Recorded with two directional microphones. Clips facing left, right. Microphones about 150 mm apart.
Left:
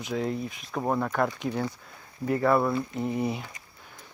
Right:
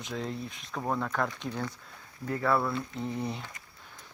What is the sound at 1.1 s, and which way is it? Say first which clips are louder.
Speech: left 5 dB; 10° left (ahead or behind).